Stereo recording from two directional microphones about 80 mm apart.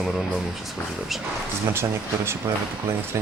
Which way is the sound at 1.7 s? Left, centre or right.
Right.